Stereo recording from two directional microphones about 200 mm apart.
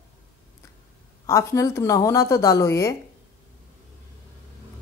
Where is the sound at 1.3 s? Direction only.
15° left (ahead or behind).